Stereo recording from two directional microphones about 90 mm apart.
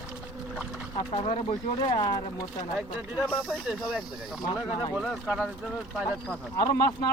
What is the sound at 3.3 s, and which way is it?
Speech, 5° right (ahead or behind).